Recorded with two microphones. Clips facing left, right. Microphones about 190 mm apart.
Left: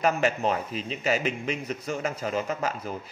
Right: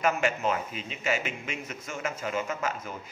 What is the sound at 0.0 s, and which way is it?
Speech, 35° left (ahead or behind).